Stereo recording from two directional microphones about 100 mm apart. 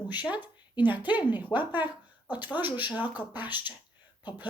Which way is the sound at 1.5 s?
10° left (ahead or behind).